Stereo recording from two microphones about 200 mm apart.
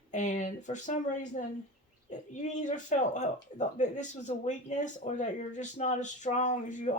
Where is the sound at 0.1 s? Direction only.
40° left (ahead or behind).